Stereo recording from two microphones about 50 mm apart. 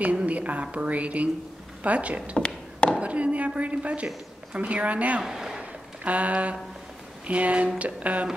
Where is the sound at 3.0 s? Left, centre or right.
Right.